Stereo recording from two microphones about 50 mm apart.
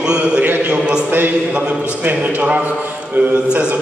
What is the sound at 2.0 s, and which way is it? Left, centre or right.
Speech, right.